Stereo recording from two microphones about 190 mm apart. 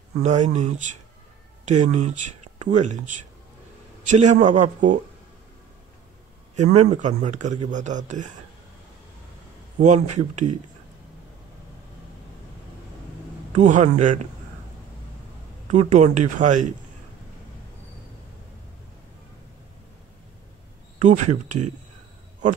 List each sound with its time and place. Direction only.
0.2 s speech: 40° right (ahead or behind)
6.5 s speech: 40° right (ahead or behind)
9.8 s speech: 40° right (ahead or behind)
13.6 s speech: 40° right (ahead or behind)
15.7 s speech: 40° right (ahead or behind)
21.0 s speech: 40° right (ahead or behind)